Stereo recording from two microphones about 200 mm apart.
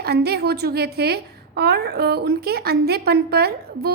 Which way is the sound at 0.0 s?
55° right (ahead or behind).